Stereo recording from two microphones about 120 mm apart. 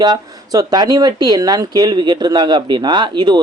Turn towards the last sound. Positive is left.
turn(degrees=-40)  # may be behind; listen again after turning